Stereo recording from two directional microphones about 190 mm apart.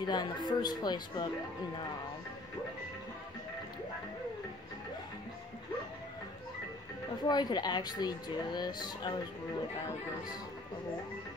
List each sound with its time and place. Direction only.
0.0 s speech: 20° left (ahead or behind)
7.2 s speech: 20° left (ahead or behind)